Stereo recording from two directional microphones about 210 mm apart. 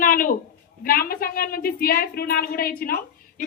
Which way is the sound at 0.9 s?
45° left (ahead or behind).